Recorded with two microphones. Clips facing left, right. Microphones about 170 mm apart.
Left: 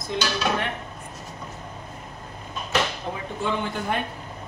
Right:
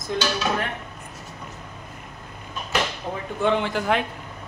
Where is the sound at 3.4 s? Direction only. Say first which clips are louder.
Right 5 dB; 85° right.